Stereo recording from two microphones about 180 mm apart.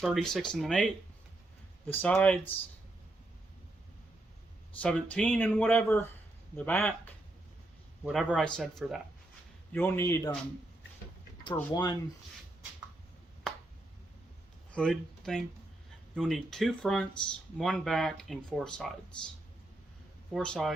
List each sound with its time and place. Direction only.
0.0 s speech: centre (ahead or behind)
1.9 s speech: 10° left (ahead or behind)
4.8 s speech: 5° left (ahead or behind)
9.7 s speech: 15° left (ahead or behind)
11.5 s speech: 20° left (ahead or behind)
14.7 s speech: 5° left (ahead or behind)
20.3 s speech: 5° left (ahead or behind)